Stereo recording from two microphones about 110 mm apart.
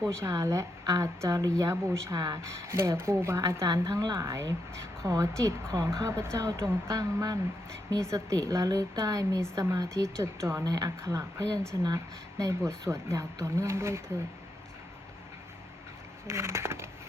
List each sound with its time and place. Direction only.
0.2 s a woman's voice: 30° right (ahead or behind)
16.2 s speech: 25° right (ahead or behind)